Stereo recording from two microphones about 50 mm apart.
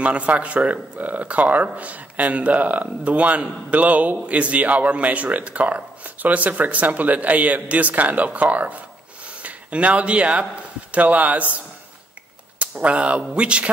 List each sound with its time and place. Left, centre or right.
0.0 s speech: right